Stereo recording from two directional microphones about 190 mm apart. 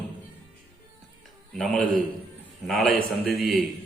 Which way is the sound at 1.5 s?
Centre (ahead or behind).